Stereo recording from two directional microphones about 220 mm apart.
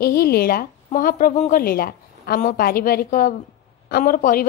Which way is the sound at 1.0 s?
40° left (ahead or behind).